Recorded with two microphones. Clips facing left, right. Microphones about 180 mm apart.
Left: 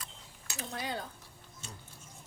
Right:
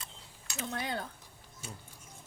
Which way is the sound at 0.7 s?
55° right (ahead or behind).